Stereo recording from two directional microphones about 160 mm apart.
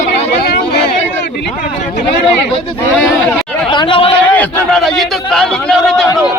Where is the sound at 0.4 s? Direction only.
85° left.